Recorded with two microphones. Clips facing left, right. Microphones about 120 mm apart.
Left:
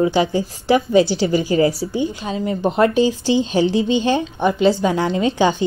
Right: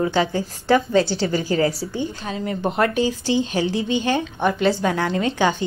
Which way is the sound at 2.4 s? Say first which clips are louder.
Left 4 dB; 25° left (ahead or behind).